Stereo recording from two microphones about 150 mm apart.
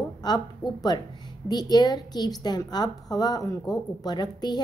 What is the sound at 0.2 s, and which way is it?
A woman's voice, 25° left (ahead or behind).